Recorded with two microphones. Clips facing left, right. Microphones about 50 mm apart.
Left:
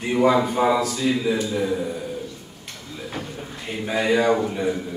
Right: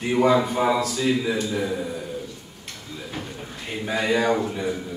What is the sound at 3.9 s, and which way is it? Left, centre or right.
Speech, centre.